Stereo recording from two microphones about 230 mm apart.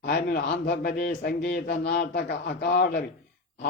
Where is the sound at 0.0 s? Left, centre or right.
Left.